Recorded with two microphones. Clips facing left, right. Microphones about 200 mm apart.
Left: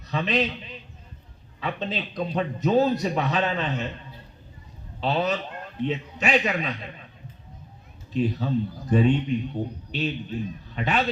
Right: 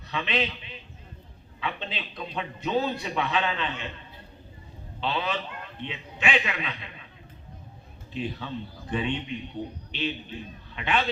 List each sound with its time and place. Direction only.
0.1 s a man's voice: 40° left (ahead or behind)
1.6 s a man's voice: 40° left (ahead or behind)
4.9 s a man's voice: 40° left (ahead or behind)
8.1 s a man's voice: 40° left (ahead or behind)